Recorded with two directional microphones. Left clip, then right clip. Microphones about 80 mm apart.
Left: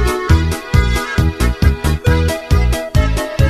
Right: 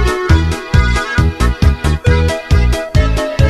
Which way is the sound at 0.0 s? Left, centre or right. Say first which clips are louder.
Right 2 dB; centre.